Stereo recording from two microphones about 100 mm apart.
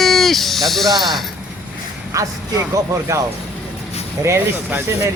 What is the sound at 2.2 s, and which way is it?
Speech, 35° right (ahead or behind).